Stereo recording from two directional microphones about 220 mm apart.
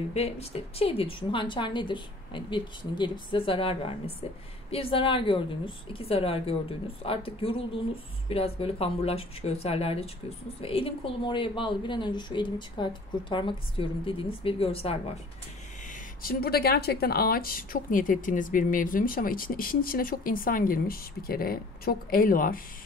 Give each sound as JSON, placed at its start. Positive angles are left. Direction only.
{"t": 0.1, "sound": "a woman's voice", "side_deg": 25}
{"t": 16.2, "sound": "speech", "side_deg": 40}